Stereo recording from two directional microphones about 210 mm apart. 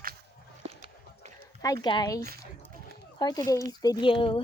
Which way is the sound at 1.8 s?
20° left (ahead or behind).